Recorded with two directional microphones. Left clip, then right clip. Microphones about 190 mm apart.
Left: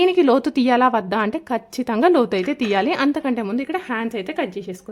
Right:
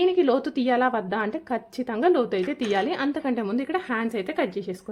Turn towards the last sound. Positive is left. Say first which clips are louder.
# left 2 dB
turn(degrees=10)  # may be behind; listen again after turning